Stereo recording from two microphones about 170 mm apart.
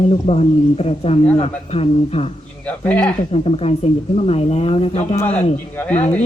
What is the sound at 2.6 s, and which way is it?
Speech, 10° left (ahead or behind).